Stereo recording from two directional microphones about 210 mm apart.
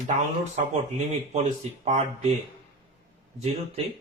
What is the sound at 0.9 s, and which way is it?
Speech, 30° right (ahead or behind).